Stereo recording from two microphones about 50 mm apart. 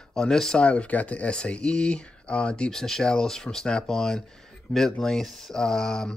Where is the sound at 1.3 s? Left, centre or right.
Centre.